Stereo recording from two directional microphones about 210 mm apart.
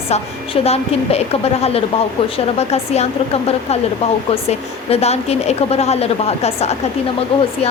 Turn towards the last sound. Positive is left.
turn(degrees=30)  # may be behind; listen again after turning